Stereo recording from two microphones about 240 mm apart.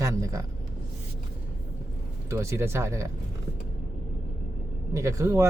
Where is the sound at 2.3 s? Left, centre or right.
Centre.